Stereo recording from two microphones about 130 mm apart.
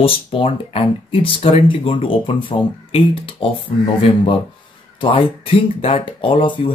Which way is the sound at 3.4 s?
40° left (ahead or behind).